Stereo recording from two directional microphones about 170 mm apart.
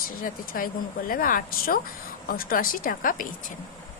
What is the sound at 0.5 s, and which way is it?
Speech, 55° left (ahead or behind).